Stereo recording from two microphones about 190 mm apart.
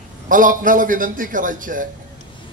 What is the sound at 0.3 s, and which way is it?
A man's voice, 45° right (ahead or behind).